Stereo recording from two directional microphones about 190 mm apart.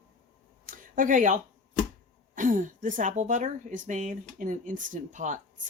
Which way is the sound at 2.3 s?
45° right (ahead or behind).